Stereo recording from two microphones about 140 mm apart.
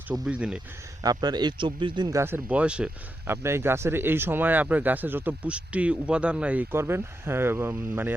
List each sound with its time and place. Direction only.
0.3 s speech: 5° right (ahead or behind)
1.0 s speech: 30° right (ahead or behind)
2.1 s speech: 15° right (ahead or behind)